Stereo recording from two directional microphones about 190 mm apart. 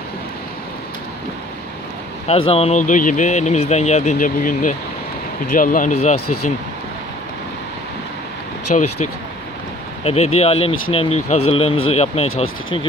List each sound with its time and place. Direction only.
2.2 s speech: 30° left (ahead or behind)
8.7 s speech: 40° left (ahead or behind)
10.0 s speech: 35° left (ahead or behind)